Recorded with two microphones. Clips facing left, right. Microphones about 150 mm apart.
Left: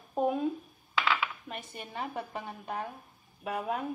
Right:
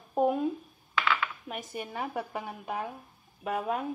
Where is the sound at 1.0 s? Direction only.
10° left (ahead or behind).